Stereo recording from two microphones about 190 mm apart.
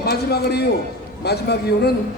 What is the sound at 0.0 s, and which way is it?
A man's voice, 55° left (ahead or behind).